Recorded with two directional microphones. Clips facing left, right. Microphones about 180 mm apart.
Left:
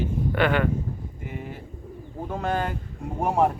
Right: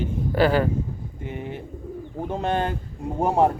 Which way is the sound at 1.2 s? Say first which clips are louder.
Right 6 dB; 25° right (ahead or behind).